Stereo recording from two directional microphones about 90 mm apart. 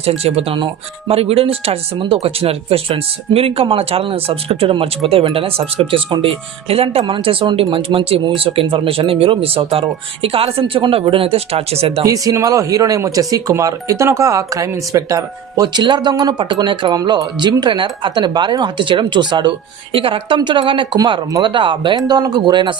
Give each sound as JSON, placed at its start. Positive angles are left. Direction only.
{"t": 0.1, "sound": "speech", "side_deg": -90}
{"t": 1.1, "sound": "speech", "side_deg": -90}
{"t": 12.0, "sound": "speech", "side_deg": -40}
{"t": 20.0, "sound": "speech", "side_deg": -80}
{"t": 21.9, "sound": "speech", "side_deg": -50}